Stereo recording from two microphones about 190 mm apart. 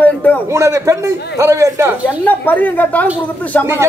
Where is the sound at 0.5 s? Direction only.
15° right (ahead or behind).